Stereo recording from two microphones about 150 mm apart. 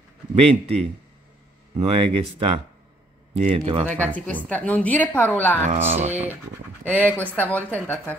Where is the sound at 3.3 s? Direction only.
40° right (ahead or behind).